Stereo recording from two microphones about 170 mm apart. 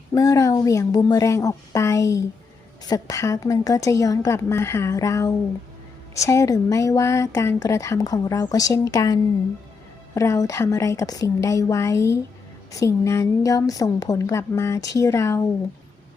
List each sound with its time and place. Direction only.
0.1 s speech: 20° left (ahead or behind)
10.2 s a woman's voice: 20° left (ahead or behind)